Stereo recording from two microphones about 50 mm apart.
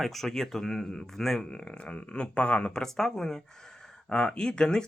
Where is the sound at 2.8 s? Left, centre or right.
Centre.